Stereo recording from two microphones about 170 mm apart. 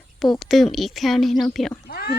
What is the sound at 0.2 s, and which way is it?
A woman's voice, centre (ahead or behind).